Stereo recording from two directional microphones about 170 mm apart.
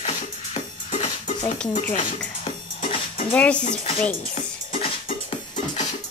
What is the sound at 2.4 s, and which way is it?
Music, 30° left (ahead or behind).